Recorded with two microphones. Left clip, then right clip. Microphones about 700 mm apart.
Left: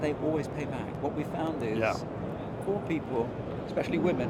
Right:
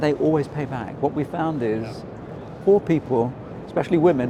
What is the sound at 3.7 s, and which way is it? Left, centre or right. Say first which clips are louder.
Speech: right 11 dB; right.